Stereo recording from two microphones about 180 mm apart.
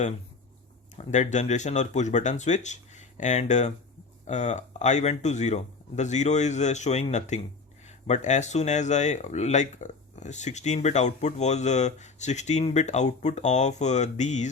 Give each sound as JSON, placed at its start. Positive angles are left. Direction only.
{"t": 0.9, "sound": "speech", "side_deg": 40}